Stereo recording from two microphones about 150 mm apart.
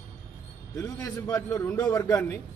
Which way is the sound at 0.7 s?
25° left (ahead or behind).